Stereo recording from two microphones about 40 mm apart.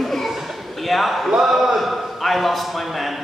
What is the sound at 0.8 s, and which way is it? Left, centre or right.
Speech, centre.